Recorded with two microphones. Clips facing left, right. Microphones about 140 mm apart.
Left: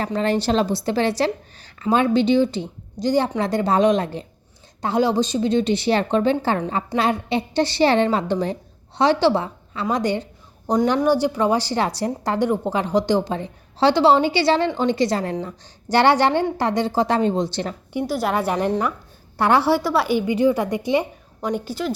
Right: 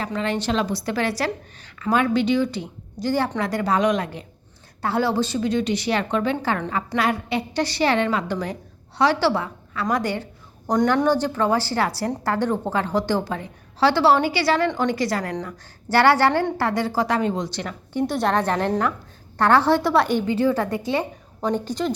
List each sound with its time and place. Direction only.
0.0 s a woman's voice: 40° left (ahead or behind)
4.8 s a woman's voice: 20° left (ahead or behind)
17.9 s a woman's voice: 5° left (ahead or behind)